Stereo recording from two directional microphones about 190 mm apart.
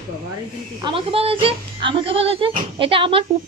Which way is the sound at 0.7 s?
25° right (ahead or behind).